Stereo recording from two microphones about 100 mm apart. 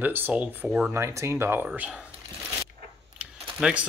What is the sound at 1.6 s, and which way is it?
Speech, 10° right (ahead or behind).